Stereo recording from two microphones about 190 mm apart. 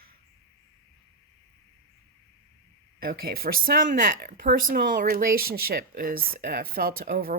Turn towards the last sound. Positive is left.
turn(degrees=-50)  # may be behind; listen again after turning